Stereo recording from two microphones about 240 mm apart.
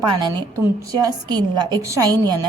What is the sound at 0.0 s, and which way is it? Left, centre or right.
A woman's voice, centre.